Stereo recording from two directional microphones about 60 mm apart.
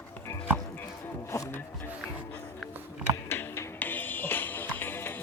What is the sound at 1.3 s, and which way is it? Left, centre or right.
Music, left.